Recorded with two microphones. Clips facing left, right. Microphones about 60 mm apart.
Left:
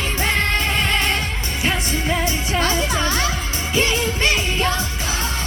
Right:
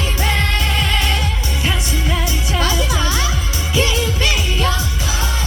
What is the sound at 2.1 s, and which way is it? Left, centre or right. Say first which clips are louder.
Music: left 2 dB; left.